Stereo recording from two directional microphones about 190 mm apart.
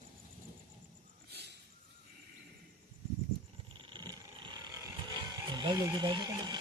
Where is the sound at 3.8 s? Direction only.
25° right (ahead or behind).